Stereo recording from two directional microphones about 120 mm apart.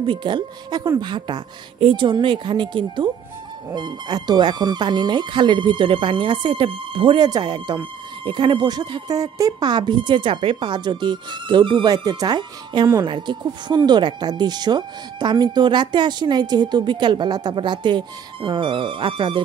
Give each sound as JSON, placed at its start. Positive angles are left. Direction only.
{"t": 0.0, "sound": "speech", "side_deg": -40}